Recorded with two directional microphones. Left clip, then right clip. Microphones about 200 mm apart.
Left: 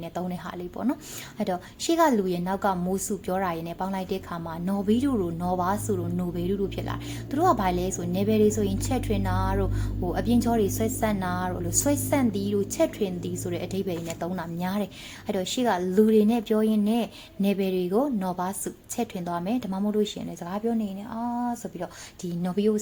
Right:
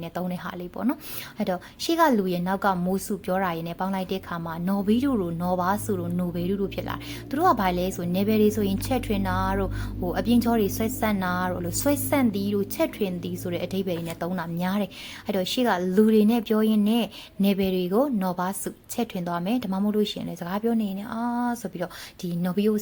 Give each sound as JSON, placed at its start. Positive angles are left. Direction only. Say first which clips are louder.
{"t": 0.1, "sound": "a woman's voice", "louder": "right 3 dB", "side_deg": -25}